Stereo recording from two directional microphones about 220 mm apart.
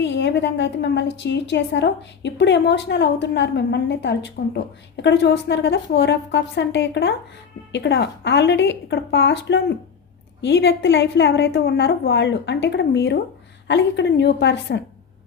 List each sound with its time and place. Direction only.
0.0 s a woman's voice: 55° left (ahead or behind)